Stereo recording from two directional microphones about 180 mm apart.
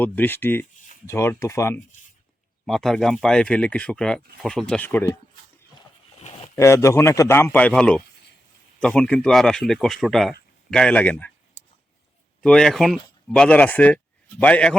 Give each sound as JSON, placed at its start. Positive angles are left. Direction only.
{"t": 0.0, "sound": "a man's voice", "side_deg": 10}
{"t": 2.6, "sound": "speech", "side_deg": 0}
{"t": 6.1, "sound": "a sound", "side_deg": 35}
{"t": 6.6, "sound": "a man's voice", "side_deg": 15}
{"t": 12.4, "sound": "a man's voice", "side_deg": 5}